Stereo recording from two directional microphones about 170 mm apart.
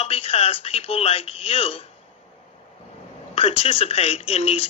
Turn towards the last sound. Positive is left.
turn(degrees=35)  # may be behind; listen again after turning